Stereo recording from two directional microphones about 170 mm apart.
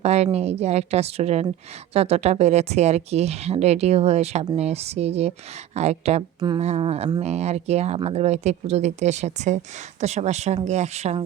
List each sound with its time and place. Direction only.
0.0 s a woman's voice: 40° right (ahead or behind)